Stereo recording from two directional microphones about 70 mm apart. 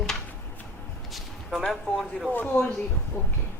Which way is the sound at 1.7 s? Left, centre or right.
Centre.